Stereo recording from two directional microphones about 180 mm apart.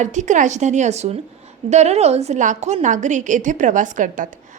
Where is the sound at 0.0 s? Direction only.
40° right (ahead or behind).